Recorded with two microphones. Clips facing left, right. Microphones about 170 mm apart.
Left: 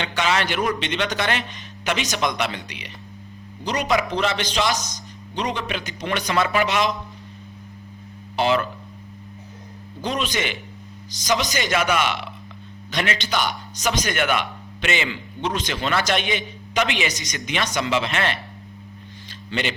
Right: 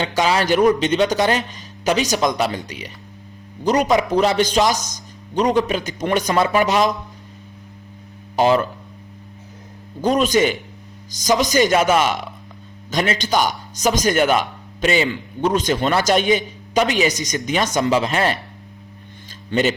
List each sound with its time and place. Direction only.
0.0 s speech: 35° right (ahead or behind)
8.4 s speech: 40° right (ahead or behind)
10.0 s speech: 45° right (ahead or behind)
19.5 s speech: 40° right (ahead or behind)